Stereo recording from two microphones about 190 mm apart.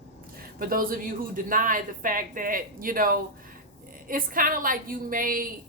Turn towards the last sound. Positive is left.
turn(degrees=-45)  # may be behind; listen again after turning